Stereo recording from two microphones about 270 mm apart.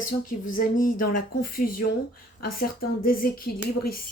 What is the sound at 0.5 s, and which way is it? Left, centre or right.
Speech, left.